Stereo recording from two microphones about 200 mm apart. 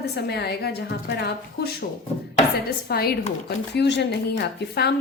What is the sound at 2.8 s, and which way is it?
Speech, 50° left (ahead or behind).